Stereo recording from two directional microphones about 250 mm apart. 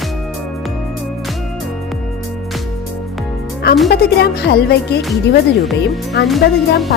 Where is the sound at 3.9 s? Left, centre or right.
Left.